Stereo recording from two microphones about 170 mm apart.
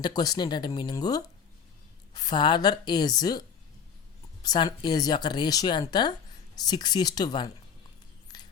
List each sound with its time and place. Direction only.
0.0 s speech: 25° left (ahead or behind)
4.4 s speech: 25° left (ahead or behind)